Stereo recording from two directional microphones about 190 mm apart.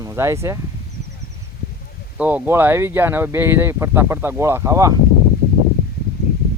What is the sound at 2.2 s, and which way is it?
Speech, 10° right (ahead or behind).